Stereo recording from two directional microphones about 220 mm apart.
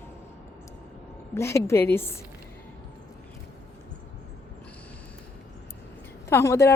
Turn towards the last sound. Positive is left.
turn(degrees=10)  # may be behind; listen again after turning